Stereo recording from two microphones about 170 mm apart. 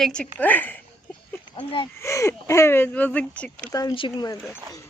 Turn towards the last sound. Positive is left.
turn(degrees=25)  # may be behind; listen again after turning